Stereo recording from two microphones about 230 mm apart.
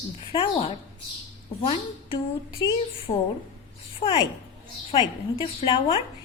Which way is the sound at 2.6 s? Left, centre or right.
Centre.